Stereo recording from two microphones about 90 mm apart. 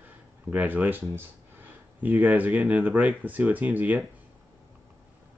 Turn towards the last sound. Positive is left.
turn(degrees=-15)  # may be behind; listen again after turning